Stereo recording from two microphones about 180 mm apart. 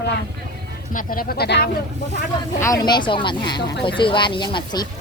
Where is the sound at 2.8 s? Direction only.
25° left (ahead or behind).